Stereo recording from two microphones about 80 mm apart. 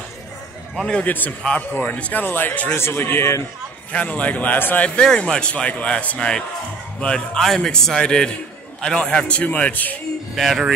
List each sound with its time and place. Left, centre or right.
0.8 s a man's voice: centre; by 3.4 s left
3.9 s speech: centre
10.3 s speech: centre